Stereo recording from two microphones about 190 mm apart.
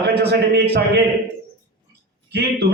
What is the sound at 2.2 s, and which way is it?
Speech, 60° right (ahead or behind).